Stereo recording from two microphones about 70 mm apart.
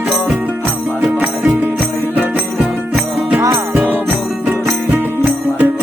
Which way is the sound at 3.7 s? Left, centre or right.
Right.